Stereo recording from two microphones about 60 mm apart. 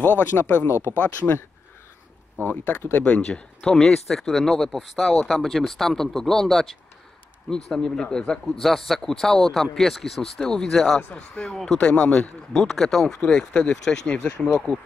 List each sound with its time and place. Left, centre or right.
0.0 s speech: left
2.9 s speech: centre
8.6 s speech: centre
11.0 s speech: left
11.5 s speech: centre
11.8 s speech: centre
12.5 s speech: centre